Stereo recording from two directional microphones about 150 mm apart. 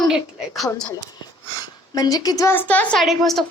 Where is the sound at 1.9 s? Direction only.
25° left (ahead or behind).